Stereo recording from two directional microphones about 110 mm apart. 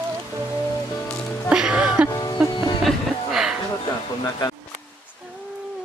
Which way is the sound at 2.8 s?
5° right (ahead or behind).